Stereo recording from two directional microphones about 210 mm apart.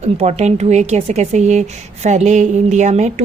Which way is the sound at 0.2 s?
30° right (ahead or behind).